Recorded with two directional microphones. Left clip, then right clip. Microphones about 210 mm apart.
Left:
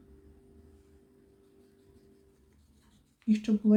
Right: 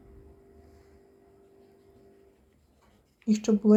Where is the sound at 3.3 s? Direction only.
20° right (ahead or behind).